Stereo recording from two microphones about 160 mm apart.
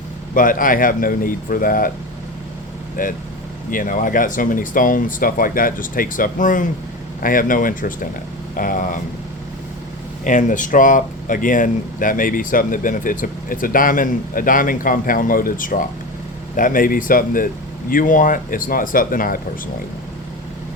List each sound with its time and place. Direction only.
0.3 s speech: 60° left (ahead or behind)
3.0 s speech: 60° left (ahead or behind)
10.2 s speech: 55° left (ahead or behind)